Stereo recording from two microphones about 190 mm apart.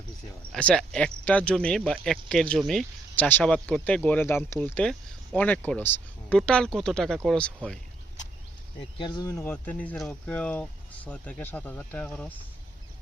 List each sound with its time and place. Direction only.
0.5 s speech: 5° left (ahead or behind)
9.0 s speech: 25° left (ahead or behind)
9.3 s speech: 10° left (ahead or behind)